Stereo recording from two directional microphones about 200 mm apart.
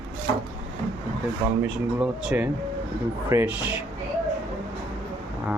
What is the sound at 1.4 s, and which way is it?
Speech, 5° right (ahead or behind).